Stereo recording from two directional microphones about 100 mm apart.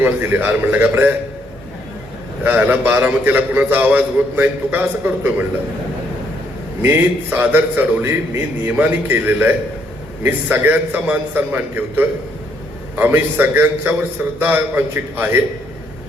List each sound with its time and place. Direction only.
0.0 s a man's voice: 20° right (ahead or behind)
2.4 s a man's voice: 20° right (ahead or behind)
6.8 s a man's voice: 20° right (ahead or behind)